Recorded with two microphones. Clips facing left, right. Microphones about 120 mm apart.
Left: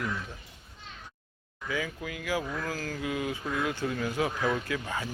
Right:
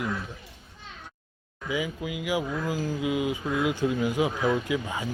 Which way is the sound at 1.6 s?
15° right (ahead or behind).